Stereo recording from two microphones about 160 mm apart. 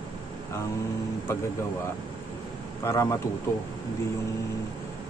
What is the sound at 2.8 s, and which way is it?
Speech, 20° left (ahead or behind).